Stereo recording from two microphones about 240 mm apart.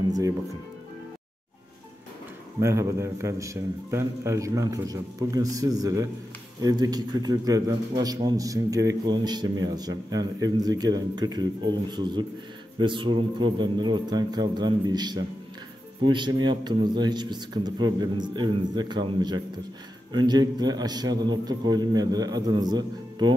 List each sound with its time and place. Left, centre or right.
2.6 s a man's voice: centre